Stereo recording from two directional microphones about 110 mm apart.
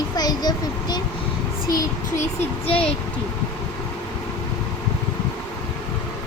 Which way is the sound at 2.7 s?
10° left (ahead or behind).